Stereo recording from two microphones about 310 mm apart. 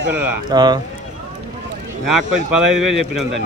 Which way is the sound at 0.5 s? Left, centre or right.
Centre.